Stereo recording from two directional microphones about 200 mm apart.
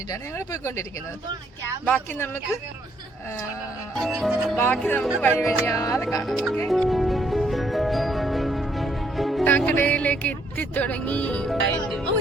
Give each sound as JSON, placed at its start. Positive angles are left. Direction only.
{"t": 0.1, "sound": "speech", "side_deg": 15}
{"t": 3.9, "sound": "music", "side_deg": 0}
{"t": 4.5, "sound": "speech", "side_deg": 10}
{"t": 5.2, "sound": "music", "side_deg": 5}
{"t": 5.6, "sound": "speech", "side_deg": 15}
{"t": 6.2, "sound": "music", "side_deg": 0}